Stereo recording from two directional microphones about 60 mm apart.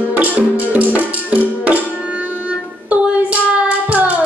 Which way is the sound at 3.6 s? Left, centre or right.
Right.